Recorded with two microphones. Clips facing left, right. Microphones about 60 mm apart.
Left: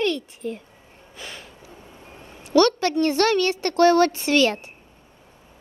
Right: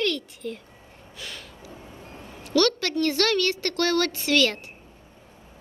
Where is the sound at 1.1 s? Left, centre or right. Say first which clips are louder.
Left 1 dB; left.